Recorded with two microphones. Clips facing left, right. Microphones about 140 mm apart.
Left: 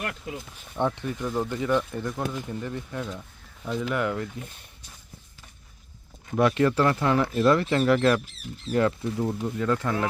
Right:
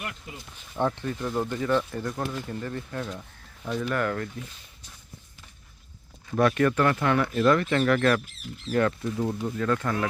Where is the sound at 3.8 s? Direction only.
15° left (ahead or behind).